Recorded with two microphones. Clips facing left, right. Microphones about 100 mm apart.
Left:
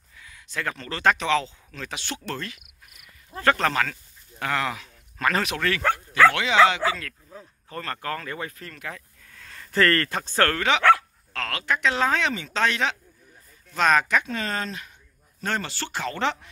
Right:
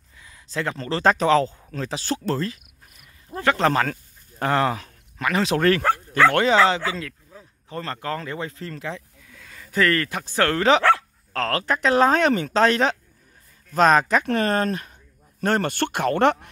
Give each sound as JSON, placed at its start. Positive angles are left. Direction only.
{"t": 0.2, "sound": "speech", "side_deg": -30}
{"t": 3.5, "sound": "speech", "side_deg": -30}
{"t": 5.2, "sound": "speech", "side_deg": -20}
{"t": 6.3, "sound": "speech", "side_deg": -40}
{"t": 6.9, "sound": "speech", "side_deg": -20}
{"t": 9.3, "sound": "speech", "side_deg": -5}
{"t": 10.5, "sound": "speech", "side_deg": -35}
{"t": 12.5, "sound": "speech", "side_deg": -40}
{"t": 14.2, "sound": "speech", "side_deg": -50}